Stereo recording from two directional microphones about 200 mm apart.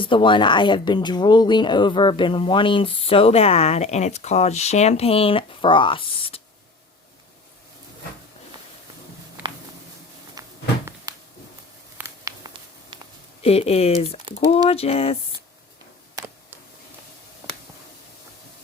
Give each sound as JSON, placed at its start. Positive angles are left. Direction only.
{"t": 0.0, "sound": "speech", "side_deg": 25}
{"t": 10.4, "sound": "cupboard open or close", "side_deg": -20}
{"t": 11.1, "sound": "a sound", "side_deg": -15}
{"t": 13.4, "sound": "speech", "side_deg": 30}